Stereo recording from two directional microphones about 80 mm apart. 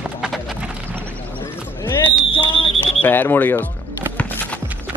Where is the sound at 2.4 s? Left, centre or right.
Left.